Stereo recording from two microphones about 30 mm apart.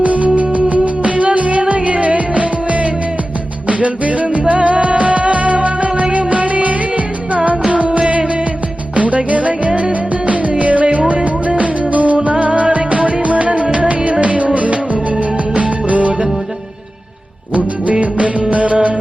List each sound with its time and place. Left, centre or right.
0.0 s music: right
9.0 s music: right
18.0 s music: right